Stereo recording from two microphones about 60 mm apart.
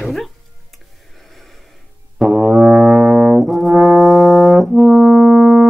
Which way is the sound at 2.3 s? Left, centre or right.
Right.